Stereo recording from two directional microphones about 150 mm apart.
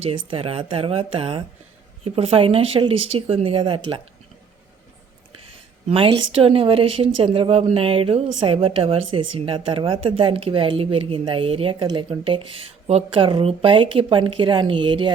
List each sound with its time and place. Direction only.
0.0 s a woman's voice: 35° right (ahead or behind)
5.9 s a woman's voice: 40° right (ahead or behind)